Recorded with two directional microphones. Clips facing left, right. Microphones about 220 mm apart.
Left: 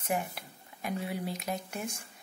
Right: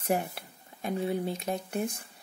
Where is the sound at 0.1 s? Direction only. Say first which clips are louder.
Right 1 dB; 35° right (ahead or behind).